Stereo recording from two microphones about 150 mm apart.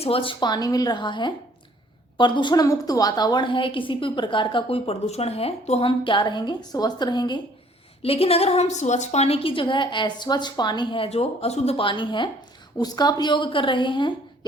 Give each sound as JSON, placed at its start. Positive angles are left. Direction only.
{"t": 0.0, "sound": "a woman's voice", "side_deg": 40}
{"t": 8.0, "sound": "a woman's voice", "side_deg": 40}